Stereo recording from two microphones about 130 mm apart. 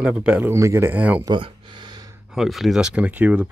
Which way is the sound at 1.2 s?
35° right (ahead or behind).